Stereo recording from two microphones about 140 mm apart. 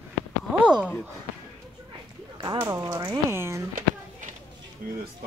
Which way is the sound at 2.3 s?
25° right (ahead or behind).